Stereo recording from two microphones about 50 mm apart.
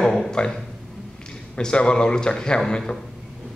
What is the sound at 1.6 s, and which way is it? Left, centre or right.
A man's voice, centre.